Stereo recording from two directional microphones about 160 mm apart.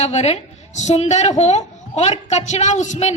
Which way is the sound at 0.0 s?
40° left (ahead or behind).